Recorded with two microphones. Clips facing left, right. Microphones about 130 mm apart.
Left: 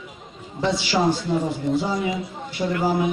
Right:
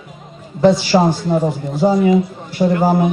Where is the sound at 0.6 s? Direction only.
45° right (ahead or behind).